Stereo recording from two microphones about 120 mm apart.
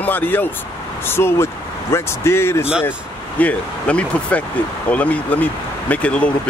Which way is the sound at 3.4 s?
10° left (ahead or behind).